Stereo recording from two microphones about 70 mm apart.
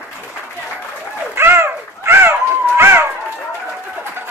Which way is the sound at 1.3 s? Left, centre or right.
Right.